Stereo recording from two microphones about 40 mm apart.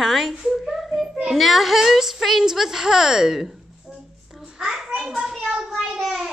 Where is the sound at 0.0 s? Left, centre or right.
Centre.